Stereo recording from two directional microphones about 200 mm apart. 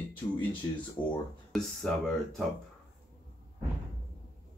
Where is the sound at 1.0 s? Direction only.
25° left (ahead or behind).